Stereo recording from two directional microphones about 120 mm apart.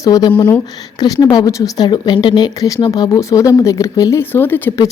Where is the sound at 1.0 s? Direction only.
35° left (ahead or behind); by 4.7 s 15° left (ahead or behind).